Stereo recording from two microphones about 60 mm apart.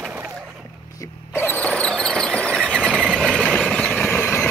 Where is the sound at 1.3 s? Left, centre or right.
Left.